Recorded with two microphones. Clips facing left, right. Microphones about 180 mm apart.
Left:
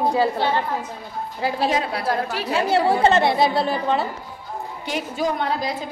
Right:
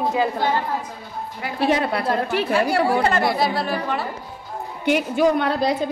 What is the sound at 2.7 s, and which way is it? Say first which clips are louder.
A woman's voice: left 2 dB; 25° left (ahead or behind).